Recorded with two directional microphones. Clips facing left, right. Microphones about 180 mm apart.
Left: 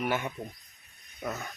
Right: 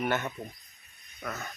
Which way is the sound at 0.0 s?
10° left (ahead or behind).